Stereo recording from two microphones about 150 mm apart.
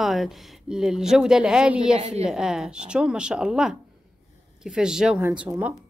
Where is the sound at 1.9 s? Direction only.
45° right (ahead or behind).